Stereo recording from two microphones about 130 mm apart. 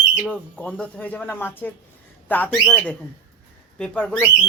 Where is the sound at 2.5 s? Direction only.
Centre (ahead or behind).